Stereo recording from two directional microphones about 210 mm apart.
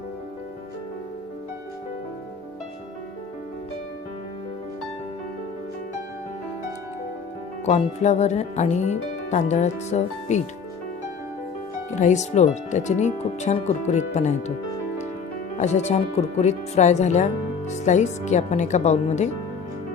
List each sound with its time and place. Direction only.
7.6 s speech: 30° left (ahead or behind)
11.9 s speech: 35° left (ahead or behind)
15.5 s speech: 35° left (ahead or behind)